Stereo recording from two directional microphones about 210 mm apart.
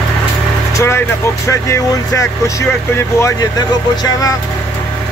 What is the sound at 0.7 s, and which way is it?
Speech, 10° left (ahead or behind).